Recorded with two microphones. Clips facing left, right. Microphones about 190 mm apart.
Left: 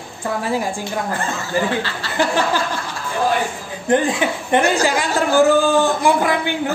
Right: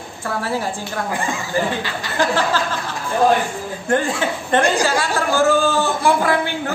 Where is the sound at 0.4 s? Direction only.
15° left (ahead or behind).